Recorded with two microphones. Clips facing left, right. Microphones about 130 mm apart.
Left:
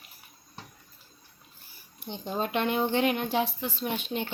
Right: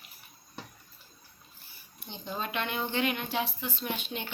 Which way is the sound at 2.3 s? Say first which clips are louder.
Left 6 dB; 35° left (ahead or behind).